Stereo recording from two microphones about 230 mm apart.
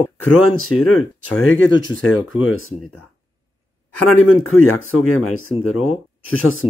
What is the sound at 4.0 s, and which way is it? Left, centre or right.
Speech, left.